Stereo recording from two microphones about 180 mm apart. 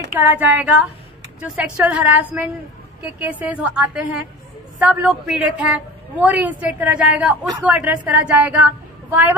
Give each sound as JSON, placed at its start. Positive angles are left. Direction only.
{"t": 0.1, "sound": "a woman's voice", "side_deg": -10}